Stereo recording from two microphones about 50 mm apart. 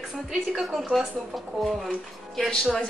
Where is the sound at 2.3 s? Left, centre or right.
Centre.